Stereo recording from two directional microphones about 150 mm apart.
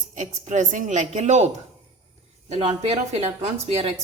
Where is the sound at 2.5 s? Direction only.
45° right (ahead or behind).